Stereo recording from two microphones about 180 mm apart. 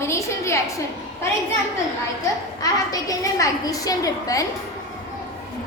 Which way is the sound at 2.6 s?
20° left (ahead or behind).